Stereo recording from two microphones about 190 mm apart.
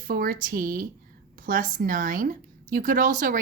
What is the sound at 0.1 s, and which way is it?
Speech, 50° right (ahead or behind).